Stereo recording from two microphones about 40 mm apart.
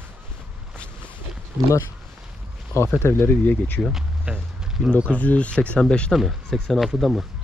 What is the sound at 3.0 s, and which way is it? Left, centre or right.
Speech, left.